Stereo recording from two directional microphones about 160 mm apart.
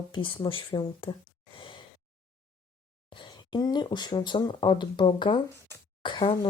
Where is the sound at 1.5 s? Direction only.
30° left (ahead or behind).